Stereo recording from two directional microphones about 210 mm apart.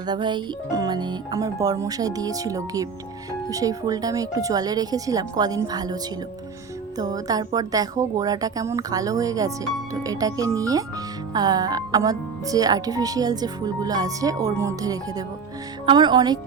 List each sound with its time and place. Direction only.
0.1 s speech: 20° right (ahead or behind)